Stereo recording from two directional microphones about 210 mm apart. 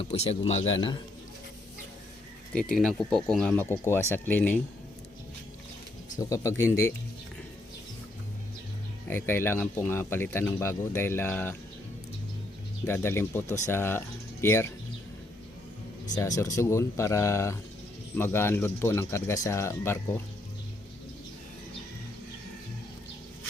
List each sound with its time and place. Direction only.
0.0 s speech: 30° left (ahead or behind)
2.6 s speech: 5° left (ahead or behind)
6.1 s speech: 15° left (ahead or behind)
9.0 s speech: 10° left (ahead or behind)
12.8 s speech: 10° left (ahead or behind)
16.1 s speech: 15° left (ahead or behind)